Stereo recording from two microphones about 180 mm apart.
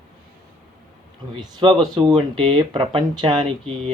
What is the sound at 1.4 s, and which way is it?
Speech, 25° right (ahead or behind).